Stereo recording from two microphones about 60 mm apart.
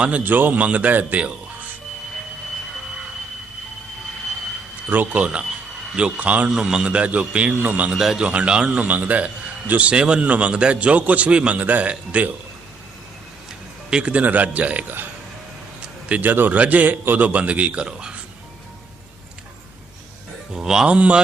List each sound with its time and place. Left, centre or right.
0.3 s a man's voice: right
4.9 s a man's voice: right
6.5 s a man's voice: centre; by 7.9 s right
7.9 s speech: centre
8.2 s a man's voice: right
13.9 s a man's voice: right
16.2 s a man's voice: right; by 18.2 s centre
20.5 s speech: centre